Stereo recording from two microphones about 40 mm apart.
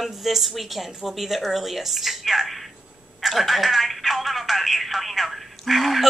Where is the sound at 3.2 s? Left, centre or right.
Centre.